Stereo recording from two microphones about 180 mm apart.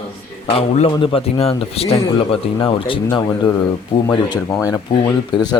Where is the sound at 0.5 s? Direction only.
35° left (ahead or behind).